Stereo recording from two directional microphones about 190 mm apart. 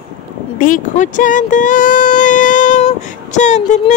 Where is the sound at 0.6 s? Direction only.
45° left (ahead or behind).